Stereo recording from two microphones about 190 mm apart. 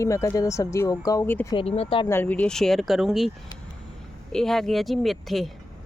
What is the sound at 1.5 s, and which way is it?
Speech, 30° left (ahead or behind).